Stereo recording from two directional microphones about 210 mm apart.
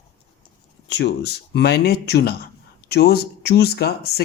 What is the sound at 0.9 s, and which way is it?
Speech, 55° left (ahead or behind).